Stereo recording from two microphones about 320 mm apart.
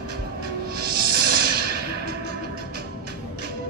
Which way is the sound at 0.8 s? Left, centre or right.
Right.